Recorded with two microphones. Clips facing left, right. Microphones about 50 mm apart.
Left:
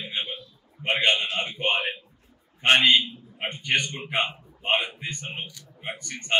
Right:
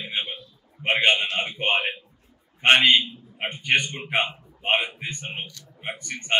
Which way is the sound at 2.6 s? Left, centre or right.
Right.